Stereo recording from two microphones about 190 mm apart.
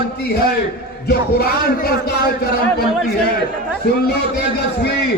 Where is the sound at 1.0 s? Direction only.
55° left (ahead or behind).